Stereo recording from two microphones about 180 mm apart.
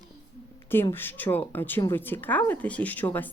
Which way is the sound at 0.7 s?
10° left (ahead or behind).